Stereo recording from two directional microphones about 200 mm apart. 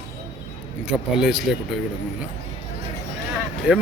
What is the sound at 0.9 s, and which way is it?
Speech, 5° right (ahead or behind).